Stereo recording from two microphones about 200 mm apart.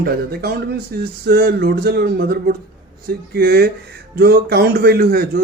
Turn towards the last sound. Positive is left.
turn(degrees=-50)  # may be behind; listen again after turning